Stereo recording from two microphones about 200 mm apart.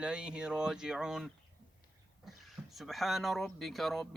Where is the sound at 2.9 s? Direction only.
Centre (ahead or behind).